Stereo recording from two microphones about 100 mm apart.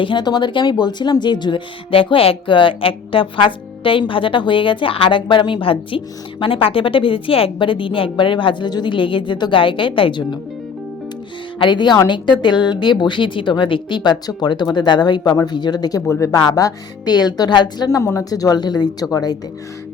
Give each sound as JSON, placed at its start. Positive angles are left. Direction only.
{"t": 0.0, "sound": "speech", "side_deg": 50}
{"t": 11.6, "sound": "a woman's voice", "side_deg": 50}